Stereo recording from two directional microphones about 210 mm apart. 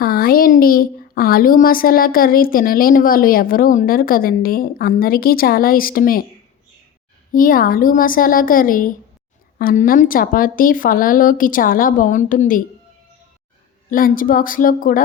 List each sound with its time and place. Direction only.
0.0 s a woman's voice: 45° left (ahead or behind)
7.3 s a woman's voice: 40° left (ahead or behind)
13.9 s a woman's voice: 40° left (ahead or behind)